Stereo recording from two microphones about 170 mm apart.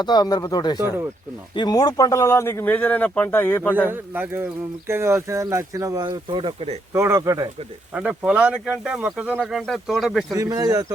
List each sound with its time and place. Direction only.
0.0 s speech: 25° left (ahead or behind)
0.8 s speech: 15° right (ahead or behind)
1.5 s speech: 25° left (ahead or behind)
3.8 s speech: 10° right (ahead or behind); by 6.7 s 30° right (ahead or behind)
6.9 s speech: 15° right (ahead or behind)
7.9 s speech: 5° right (ahead or behind)
10.3 s speech: 20° right (ahead or behind)